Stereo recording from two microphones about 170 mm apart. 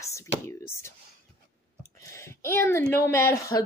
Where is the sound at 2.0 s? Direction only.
15° left (ahead or behind).